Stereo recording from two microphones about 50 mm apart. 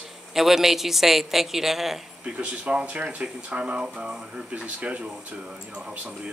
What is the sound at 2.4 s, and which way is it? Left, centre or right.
Speech, centre.